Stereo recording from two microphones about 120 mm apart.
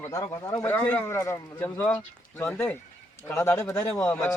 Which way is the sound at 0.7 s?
15° left (ahead or behind).